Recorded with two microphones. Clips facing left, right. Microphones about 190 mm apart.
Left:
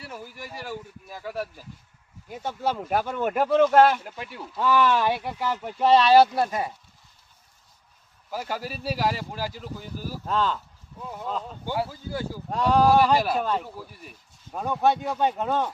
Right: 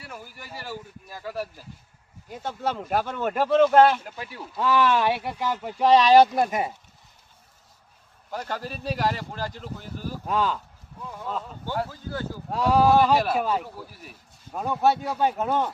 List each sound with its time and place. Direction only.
0.1 s speech: centre (ahead or behind); by 6.7 s 20° right (ahead or behind)
8.3 s speech: 5° left (ahead or behind)
10.2 s speech: 10° right (ahead or behind)
11.6 s speech: 10° left (ahead or behind)
12.5 s speech: 5° right (ahead or behind)